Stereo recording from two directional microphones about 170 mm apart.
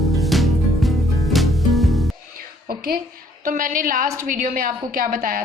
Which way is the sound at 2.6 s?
60° right (ahead or behind).